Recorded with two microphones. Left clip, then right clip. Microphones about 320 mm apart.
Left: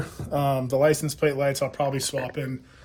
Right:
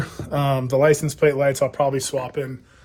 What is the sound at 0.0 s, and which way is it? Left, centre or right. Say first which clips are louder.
Speech: right 2 dB; right.